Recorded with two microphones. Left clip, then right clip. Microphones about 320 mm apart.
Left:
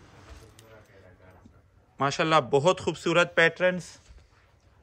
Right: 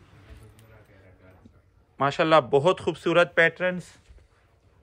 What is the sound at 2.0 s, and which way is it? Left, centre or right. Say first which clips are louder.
Speech: right 3 dB; centre.